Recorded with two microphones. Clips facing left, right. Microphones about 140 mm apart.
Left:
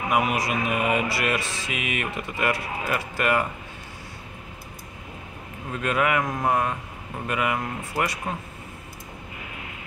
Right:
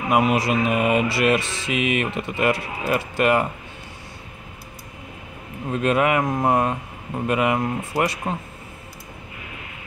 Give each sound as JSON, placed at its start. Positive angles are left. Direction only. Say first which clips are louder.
{"t": 0.1, "sound": "mantra", "louder": "right 5 dB", "side_deg": -25}
{"t": 5.7, "sound": "mantra", "louder": "right 4 dB", "side_deg": -25}